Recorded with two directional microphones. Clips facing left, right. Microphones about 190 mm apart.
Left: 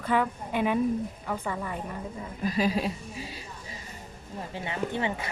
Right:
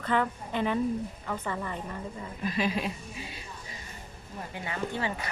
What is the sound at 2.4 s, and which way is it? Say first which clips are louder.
A woman's voice: left 3 dB; 35° left (ahead or behind).